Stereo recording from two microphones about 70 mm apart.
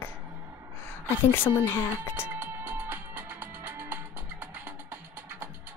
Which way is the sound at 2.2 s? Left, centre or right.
Right.